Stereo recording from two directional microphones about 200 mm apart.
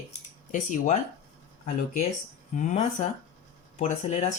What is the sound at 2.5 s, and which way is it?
Speech, 40° left (ahead or behind).